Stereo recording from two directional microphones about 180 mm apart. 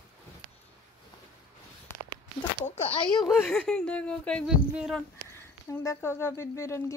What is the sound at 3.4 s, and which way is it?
Speech, 5° left (ahead or behind).